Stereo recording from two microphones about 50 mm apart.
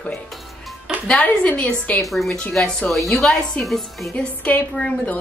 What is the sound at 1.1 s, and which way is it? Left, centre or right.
Speech, left.